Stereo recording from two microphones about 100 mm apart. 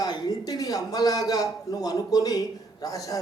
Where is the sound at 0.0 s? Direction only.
40° left (ahead or behind).